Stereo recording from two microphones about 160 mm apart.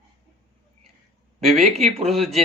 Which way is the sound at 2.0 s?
Centre (ahead or behind).